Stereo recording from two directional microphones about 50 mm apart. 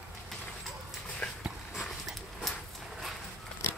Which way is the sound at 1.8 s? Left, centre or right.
Centre.